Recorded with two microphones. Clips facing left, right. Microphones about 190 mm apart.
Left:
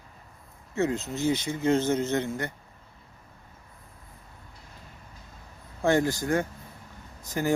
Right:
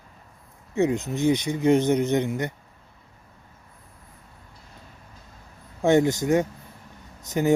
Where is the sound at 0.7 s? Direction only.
15° right (ahead or behind).